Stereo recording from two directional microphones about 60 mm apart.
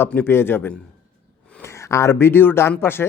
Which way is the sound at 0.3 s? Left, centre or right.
Left.